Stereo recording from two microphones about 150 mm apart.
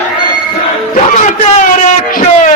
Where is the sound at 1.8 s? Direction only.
55° left (ahead or behind).